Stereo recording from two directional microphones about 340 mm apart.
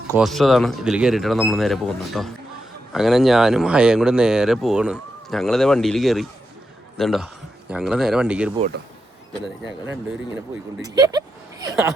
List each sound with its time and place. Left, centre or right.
0.1 s speech: centre
9.6 s speech: right
10.8 s speech: centre